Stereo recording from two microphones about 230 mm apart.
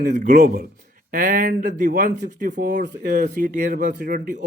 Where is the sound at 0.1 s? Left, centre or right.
Right.